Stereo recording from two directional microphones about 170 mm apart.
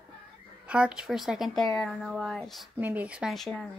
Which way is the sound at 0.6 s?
5° right (ahead or behind).